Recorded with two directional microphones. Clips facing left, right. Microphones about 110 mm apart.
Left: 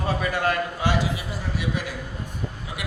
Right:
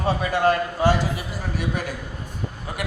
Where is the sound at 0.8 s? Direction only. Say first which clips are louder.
Right 4 dB; 45° right (ahead or behind).